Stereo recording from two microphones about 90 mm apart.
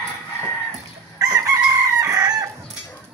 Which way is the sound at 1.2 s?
40° right (ahead or behind).